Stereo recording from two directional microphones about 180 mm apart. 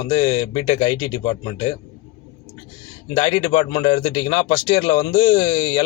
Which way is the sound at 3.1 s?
25° left (ahead or behind).